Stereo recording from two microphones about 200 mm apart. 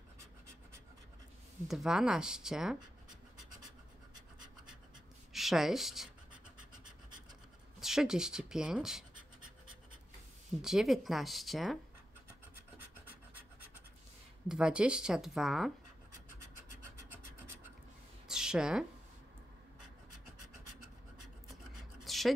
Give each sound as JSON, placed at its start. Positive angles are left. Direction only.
{"t": 1.7, "sound": "speech", "side_deg": 0}
{"t": 5.3, "sound": "speech", "side_deg": 0}
{"t": 7.8, "sound": "speech", "side_deg": 0}
{"t": 10.6, "sound": "speech", "side_deg": 0}
{"t": 14.5, "sound": "speech", "side_deg": -5}
{"t": 18.3, "sound": "a sound", "side_deg": -5}
{"t": 22.0, "sound": "a sound", "side_deg": 0}